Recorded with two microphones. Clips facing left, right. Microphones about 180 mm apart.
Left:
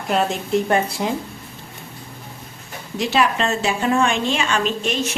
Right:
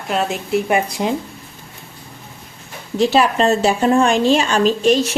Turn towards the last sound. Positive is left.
turn(degrees=-35)  # may be behind; listen again after turning